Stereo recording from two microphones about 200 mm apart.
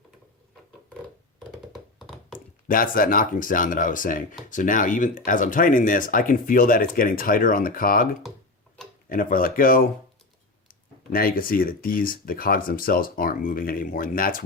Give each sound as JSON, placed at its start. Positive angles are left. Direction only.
{"t": 1.4, "sound": "a sound", "side_deg": 0}
{"t": 2.6, "sound": "speech", "side_deg": 45}
{"t": 9.0, "sound": "speech", "side_deg": 45}
{"t": 11.1, "sound": "speech", "side_deg": 45}